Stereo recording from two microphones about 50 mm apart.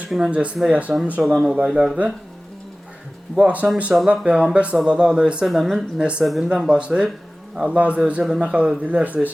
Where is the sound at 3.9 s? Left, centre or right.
Centre.